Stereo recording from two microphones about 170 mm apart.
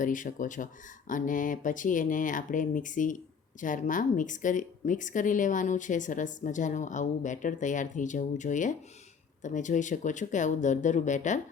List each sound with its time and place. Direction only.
0.0 s speech: 50° left (ahead or behind)